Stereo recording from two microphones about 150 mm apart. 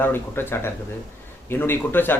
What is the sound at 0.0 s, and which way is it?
Speech, 15° left (ahead or behind).